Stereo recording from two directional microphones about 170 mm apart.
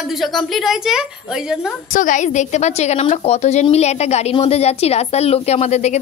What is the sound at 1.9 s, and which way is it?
A woman's voice, 50° left (ahead or behind).